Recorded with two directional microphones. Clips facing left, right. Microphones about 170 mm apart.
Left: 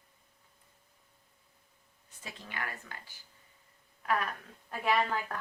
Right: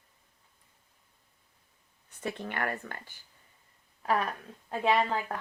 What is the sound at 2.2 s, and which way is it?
Speech, 60° right (ahead or behind).